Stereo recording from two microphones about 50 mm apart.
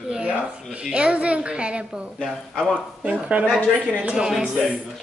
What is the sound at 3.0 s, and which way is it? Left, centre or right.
Speech, right.